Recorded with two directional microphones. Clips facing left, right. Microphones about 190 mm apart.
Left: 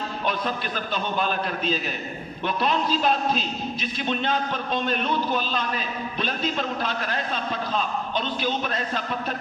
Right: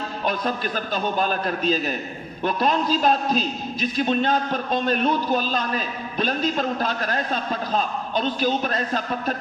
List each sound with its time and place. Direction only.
0.9 s a man's voice: 40° right (ahead or behind)